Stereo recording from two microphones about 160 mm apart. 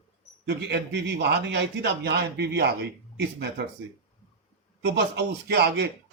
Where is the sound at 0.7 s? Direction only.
90° right.